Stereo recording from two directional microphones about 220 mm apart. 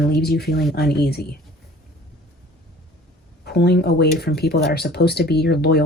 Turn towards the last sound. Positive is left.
turn(degrees=45)  # may be behind; listen again after turning